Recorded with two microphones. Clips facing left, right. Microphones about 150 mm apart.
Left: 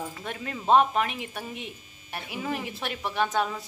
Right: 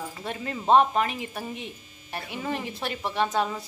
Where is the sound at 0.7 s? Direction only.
Centre (ahead or behind).